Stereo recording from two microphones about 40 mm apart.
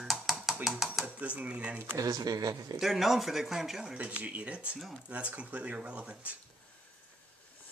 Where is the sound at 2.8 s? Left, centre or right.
Centre.